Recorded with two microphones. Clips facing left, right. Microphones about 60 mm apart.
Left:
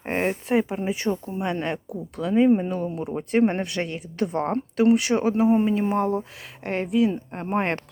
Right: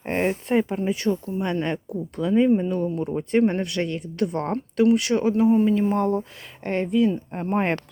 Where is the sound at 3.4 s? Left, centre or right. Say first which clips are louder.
Right 1 dB; left; by 7.4 s centre.